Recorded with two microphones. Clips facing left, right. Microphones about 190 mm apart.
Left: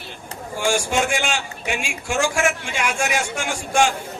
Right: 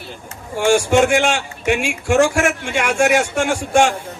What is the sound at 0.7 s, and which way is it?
Speech, 65° right (ahead or behind).